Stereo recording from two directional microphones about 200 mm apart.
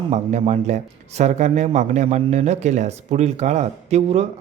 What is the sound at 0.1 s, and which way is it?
Speech, 35° right (ahead or behind).